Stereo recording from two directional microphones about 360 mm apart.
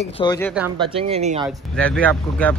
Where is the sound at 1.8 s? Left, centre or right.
Centre.